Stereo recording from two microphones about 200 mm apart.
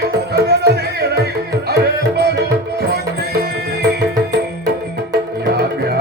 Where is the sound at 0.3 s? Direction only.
55° right (ahead or behind).